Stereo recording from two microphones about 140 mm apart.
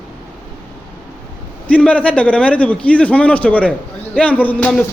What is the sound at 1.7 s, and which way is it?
A man's voice, 10° left (ahead or behind).